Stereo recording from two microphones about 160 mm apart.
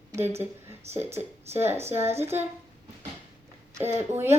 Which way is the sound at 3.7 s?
15° right (ahead or behind).